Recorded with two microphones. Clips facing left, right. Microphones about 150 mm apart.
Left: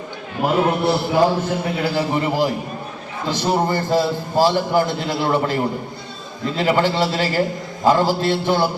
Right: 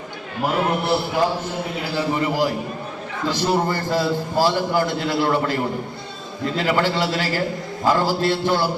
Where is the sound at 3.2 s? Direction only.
20° left (ahead or behind).